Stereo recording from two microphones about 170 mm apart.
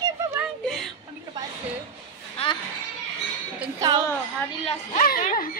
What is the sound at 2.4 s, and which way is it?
Speech, 35° left (ahead or behind).